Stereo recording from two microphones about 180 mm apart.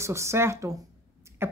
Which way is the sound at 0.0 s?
15° right (ahead or behind).